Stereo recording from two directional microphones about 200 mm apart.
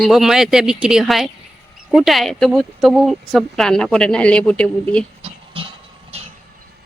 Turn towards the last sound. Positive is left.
turn(degrees=-30)  # may be behind; listen again after turning